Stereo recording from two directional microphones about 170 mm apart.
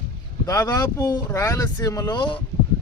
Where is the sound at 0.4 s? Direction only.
20° left (ahead or behind).